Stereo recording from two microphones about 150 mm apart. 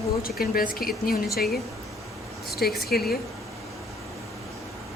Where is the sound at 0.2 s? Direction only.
80° left.